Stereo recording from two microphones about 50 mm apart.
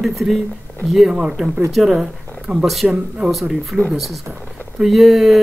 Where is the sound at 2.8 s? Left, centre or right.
Centre.